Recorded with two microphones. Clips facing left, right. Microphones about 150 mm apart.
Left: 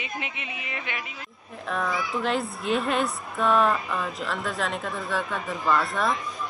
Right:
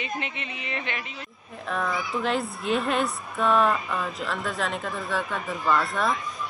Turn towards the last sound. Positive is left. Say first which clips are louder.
# even
turn(degrees=0)  # may be behind; listen again after turning